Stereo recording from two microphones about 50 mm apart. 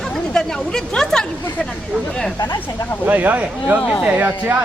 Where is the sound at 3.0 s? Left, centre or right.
Right.